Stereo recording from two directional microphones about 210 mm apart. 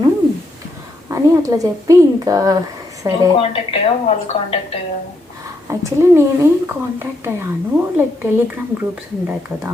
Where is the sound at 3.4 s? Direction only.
25° left (ahead or behind).